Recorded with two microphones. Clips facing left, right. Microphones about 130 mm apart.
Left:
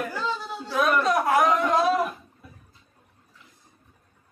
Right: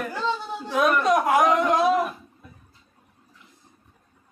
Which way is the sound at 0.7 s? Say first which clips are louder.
Right 2 dB; 15° right (ahead or behind).